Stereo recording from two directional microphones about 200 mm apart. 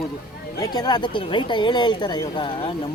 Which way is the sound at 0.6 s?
20° left (ahead or behind).